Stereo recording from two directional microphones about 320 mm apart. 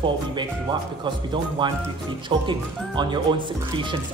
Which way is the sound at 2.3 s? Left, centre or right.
Centre.